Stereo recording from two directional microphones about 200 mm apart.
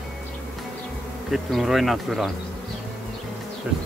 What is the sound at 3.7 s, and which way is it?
Speech, 5° right (ahead or behind).